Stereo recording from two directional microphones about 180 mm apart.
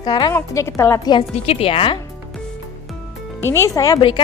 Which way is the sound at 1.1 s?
35° left (ahead or behind).